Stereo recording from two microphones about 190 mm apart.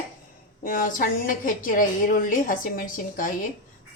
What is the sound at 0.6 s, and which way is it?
A woman's voice, 45° left (ahead or behind).